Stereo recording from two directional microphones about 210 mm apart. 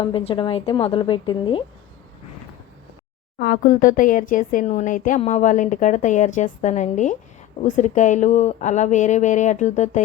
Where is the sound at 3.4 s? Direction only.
40° left (ahead or behind).